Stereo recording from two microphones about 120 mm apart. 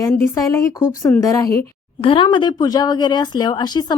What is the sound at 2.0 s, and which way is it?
Speech, 45° left (ahead or behind).